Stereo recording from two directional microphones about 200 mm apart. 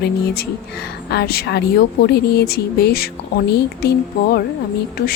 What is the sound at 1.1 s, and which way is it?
Speech, 55° left (ahead or behind).